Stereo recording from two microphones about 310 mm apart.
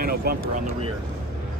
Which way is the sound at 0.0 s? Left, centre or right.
Right.